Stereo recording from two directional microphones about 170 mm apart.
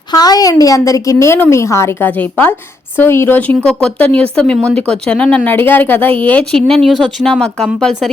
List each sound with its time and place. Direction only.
0.1 s a woman's voice: 25° left (ahead or behind); by 8.1 s 5° left (ahead or behind)